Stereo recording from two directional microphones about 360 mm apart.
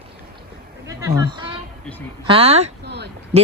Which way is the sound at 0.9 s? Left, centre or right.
Centre.